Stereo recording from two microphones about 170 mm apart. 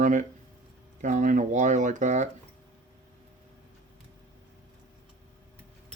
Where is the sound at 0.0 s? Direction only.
50° right (ahead or behind).